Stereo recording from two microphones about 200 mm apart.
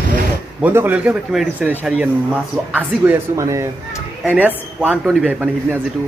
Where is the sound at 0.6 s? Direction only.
10° right (ahead or behind).